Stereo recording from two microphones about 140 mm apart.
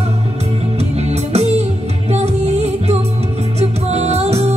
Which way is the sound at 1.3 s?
50° right (ahead or behind).